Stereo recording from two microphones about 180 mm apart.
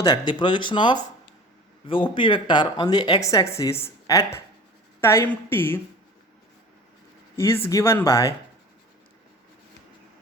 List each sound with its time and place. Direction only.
0.0 s a woman's voice: 25° left (ahead or behind)
7.3 s a woman's voice: 15° left (ahead or behind)